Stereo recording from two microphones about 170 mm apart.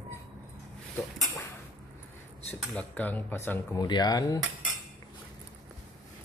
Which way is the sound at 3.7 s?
25° left (ahead or behind).